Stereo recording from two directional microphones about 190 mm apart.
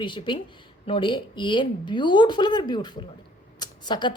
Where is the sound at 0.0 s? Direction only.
25° left (ahead or behind).